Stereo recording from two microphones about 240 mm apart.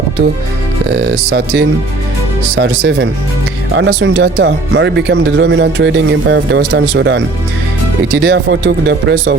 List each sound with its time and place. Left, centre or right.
0.9 s speech: right